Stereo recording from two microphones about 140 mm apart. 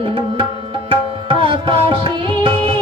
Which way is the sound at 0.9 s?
35° right (ahead or behind).